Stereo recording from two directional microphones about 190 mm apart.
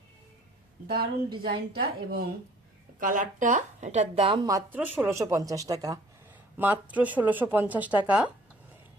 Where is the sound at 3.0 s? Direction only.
45° right (ahead or behind); by 8.3 s 5° right (ahead or behind).